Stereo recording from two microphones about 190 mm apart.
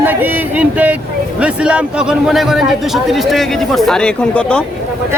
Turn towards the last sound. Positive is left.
turn(degrees=5)  # may be behind; listen again after turning